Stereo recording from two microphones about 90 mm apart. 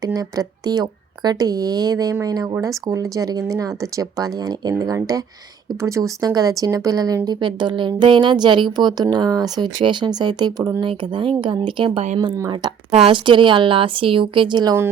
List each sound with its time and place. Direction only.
0.0 s speech: 45° right (ahead or behind)
5.8 s speech: 35° right (ahead or behind)
7.3 s speech: 60° right (ahead or behind)
10.8 s speech: 65° right (ahead or behind)